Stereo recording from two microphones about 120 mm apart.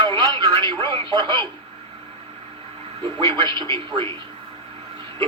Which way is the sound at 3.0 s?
45° right (ahead or behind).